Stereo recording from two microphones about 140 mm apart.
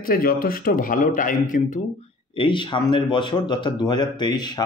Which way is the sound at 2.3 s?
35° left (ahead or behind).